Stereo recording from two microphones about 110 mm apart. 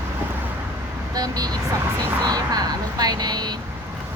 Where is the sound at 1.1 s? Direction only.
35° right (ahead or behind).